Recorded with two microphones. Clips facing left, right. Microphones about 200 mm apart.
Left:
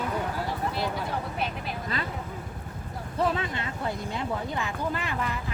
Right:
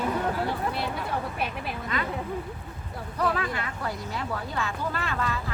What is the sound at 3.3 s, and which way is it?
Speech, 25° left (ahead or behind).